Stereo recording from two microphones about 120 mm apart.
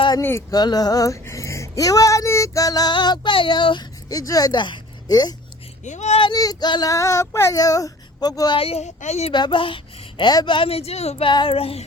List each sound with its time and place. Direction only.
0.2 s speech: 20° left (ahead or behind)
0.5 s speech: 35° left (ahead or behind)
4.1 s speech: 30° left (ahead or behind)
5.8 s speech: 75° left (ahead or behind)
6.3 s speech: 30° left (ahead or behind)
8.5 s speech: 55° left (ahead or behind)
9.3 s speech: 40° left (ahead or behind); by 11.3 s 60° left (ahead or behind)
11.3 s speech: 45° left (ahead or behind)